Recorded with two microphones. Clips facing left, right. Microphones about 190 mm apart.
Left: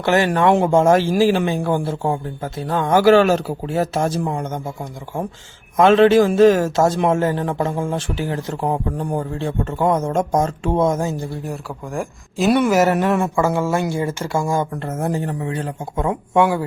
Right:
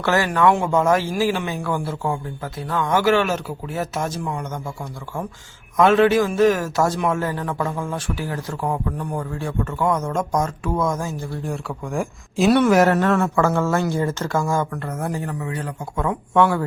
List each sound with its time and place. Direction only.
0.0 s a man's voice: 20° left (ahead or behind)
5.7 s a man's voice: 25° left (ahead or behind)
11.4 s speech: centre (ahead or behind)
14.7 s a man's voice: 25° left (ahead or behind)